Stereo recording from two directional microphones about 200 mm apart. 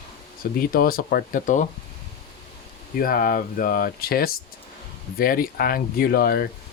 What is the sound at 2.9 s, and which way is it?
Speech, 45° left (ahead or behind).